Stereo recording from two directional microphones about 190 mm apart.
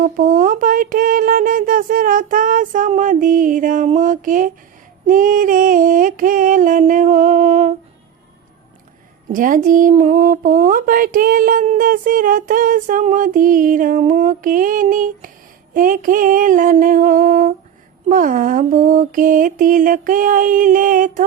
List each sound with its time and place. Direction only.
0.0 s speech: 45° right (ahead or behind)
9.3 s speech: 45° right (ahead or behind)